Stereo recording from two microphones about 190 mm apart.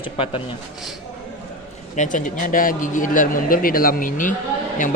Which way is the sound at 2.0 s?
40° left (ahead or behind).